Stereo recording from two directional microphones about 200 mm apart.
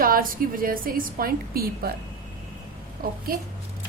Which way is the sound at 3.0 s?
45° right (ahead or behind).